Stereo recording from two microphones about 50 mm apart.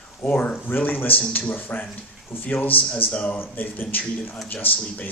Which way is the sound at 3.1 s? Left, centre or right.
Left.